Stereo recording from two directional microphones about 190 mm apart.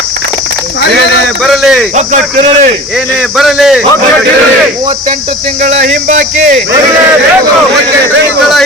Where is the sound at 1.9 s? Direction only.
40° right (ahead or behind).